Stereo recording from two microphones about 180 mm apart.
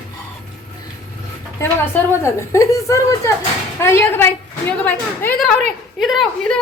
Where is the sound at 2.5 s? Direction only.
15° left (ahead or behind); by 6.6 s centre (ahead or behind).